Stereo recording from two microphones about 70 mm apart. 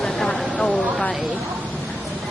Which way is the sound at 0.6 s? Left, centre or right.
Centre.